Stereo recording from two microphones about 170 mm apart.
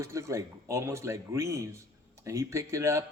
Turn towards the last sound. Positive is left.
turn(degrees=-15)  # may be behind; listen again after turning